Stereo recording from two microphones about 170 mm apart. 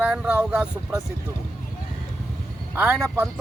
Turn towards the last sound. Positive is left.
turn(degrees=-10)  # may be behind; listen again after turning